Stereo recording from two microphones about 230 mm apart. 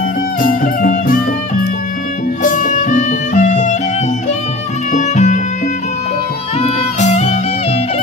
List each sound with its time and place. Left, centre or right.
0.4 s music: left
2.4 s music: left
4.9 s music: left
6.6 s music: left